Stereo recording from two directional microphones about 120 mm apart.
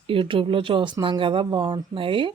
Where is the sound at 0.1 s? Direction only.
50° right (ahead or behind).